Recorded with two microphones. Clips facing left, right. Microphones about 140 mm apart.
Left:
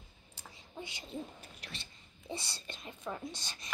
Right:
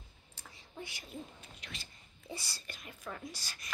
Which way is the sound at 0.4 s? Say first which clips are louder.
Left 1 dB; 20° left (ahead or behind).